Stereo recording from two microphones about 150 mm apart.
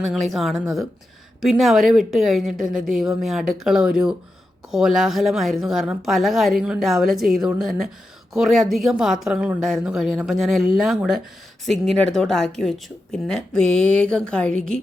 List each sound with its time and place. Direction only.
0.0 s speech: centre (ahead or behind)